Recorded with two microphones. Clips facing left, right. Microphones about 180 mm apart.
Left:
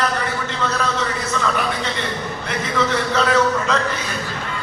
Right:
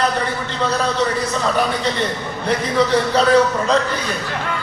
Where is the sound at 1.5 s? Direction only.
35° right (ahead or behind).